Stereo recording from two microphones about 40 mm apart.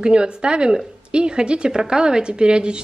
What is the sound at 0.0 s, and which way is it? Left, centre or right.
Speech, right.